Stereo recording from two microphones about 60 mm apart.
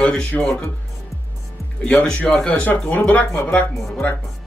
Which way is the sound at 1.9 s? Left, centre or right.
Left.